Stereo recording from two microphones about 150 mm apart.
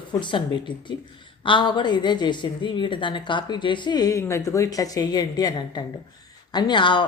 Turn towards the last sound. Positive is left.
turn(degrees=30)  # may be behind; listen again after turning